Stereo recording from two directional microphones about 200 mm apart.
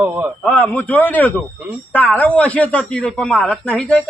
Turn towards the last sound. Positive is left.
turn(degrees=5)  # may be behind; listen again after turning